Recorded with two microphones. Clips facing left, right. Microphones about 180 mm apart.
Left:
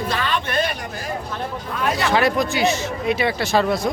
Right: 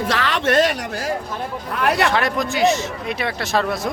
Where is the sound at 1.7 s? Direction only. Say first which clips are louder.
Right 4 dB; 65° right (ahead or behind).